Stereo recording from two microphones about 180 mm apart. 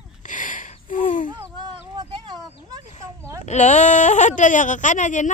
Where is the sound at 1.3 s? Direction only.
25° right (ahead or behind).